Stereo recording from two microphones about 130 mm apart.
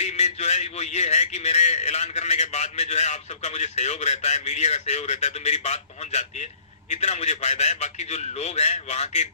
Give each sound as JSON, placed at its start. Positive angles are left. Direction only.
{"t": 0.0, "sound": "a man's voice", "side_deg": 60}